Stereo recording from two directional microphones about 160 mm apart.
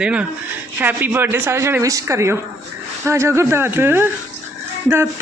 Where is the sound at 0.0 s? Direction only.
10° right (ahead or behind).